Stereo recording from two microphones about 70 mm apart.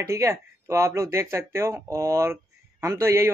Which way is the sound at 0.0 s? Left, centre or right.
Right.